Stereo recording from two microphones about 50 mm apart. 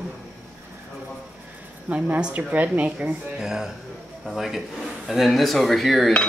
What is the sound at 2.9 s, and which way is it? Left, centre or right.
Speech, right.